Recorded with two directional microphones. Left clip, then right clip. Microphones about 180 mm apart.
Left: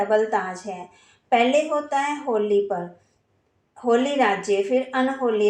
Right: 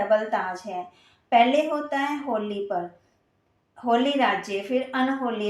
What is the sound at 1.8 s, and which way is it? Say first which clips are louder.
Speech: left 3 dB; 35° left (ahead or behind).